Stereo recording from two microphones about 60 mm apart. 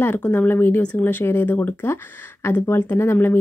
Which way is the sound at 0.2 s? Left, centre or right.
Left.